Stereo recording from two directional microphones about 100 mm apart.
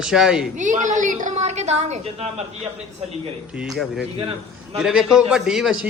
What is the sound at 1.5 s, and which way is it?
A woman's voice, 90° right.